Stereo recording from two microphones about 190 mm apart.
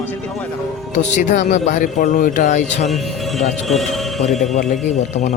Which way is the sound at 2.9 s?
Centre (ahead or behind).